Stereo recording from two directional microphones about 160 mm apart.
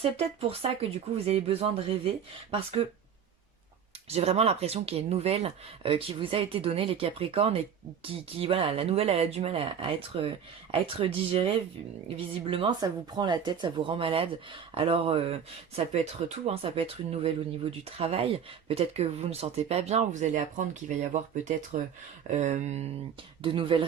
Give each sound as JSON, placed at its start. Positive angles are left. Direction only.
{"t": 0.0, "sound": "speech", "side_deg": -35}
{"t": 4.1, "sound": "speech", "side_deg": -40}
{"t": 22.3, "sound": "a sound", "side_deg": -45}
{"t": 23.4, "sound": "speech", "side_deg": -35}